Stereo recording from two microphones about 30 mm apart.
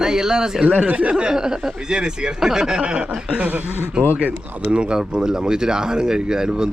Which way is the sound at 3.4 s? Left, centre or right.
Right.